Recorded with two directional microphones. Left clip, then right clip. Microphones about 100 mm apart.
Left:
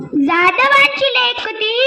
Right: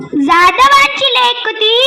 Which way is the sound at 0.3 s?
75° right (ahead or behind).